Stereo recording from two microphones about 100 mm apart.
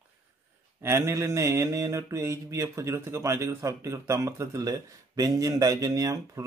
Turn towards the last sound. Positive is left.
turn(degrees=-35)  # may be behind; listen again after turning